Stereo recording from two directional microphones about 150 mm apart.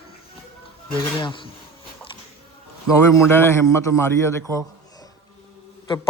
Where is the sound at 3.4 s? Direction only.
20° left (ahead or behind).